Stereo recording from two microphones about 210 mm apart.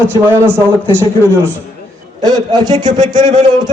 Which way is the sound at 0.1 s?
10° right (ahead or behind).